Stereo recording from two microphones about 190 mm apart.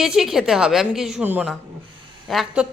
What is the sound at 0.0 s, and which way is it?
A woman's voice, centre (ahead or behind).